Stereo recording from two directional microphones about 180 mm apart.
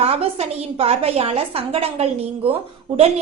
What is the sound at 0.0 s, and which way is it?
A woman's voice, 35° right (ahead or behind).